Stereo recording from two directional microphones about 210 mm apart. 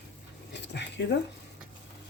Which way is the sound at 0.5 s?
55° left (ahead or behind).